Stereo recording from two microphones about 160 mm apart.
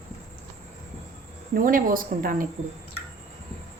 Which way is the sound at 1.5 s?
60° right (ahead or behind).